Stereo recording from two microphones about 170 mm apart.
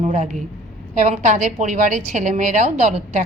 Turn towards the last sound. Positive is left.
turn(degrees=-45)  # may be behind; listen again after turning